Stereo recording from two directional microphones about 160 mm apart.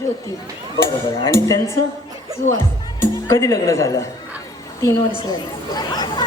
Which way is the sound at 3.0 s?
20° left (ahead or behind).